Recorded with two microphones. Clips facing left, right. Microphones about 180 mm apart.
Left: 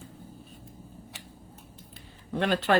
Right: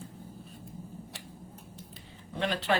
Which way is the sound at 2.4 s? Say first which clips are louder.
Left 4 dB; 55° left (ahead or behind).